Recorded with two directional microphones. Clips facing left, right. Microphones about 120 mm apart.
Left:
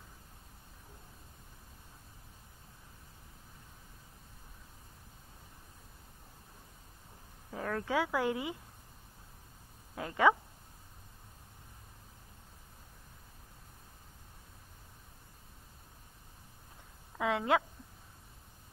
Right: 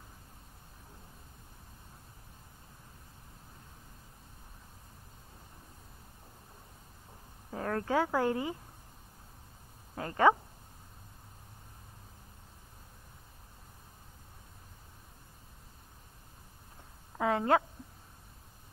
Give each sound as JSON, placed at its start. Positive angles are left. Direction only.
{"t": 7.5, "sound": "speech", "side_deg": -30}
{"t": 9.9, "sound": "speech", "side_deg": -35}
{"t": 17.2, "sound": "a sound", "side_deg": -35}